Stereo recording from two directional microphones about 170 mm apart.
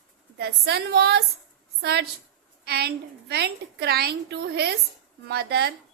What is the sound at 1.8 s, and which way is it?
A woman's voice, 75° right (ahead or behind).